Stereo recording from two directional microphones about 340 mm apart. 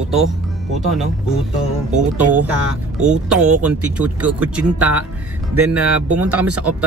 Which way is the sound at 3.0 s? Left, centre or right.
Centre.